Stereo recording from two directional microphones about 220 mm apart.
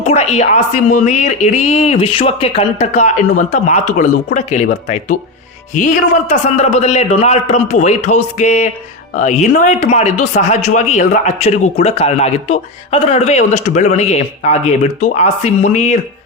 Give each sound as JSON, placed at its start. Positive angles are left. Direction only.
{"t": 0.0, "sound": "speech", "side_deg": 30}